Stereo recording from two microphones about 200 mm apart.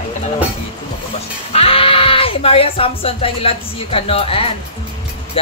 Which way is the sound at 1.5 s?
30° left (ahead or behind).